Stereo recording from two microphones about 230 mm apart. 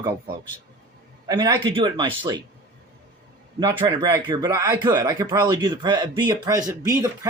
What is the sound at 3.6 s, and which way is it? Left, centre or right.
Speech, centre.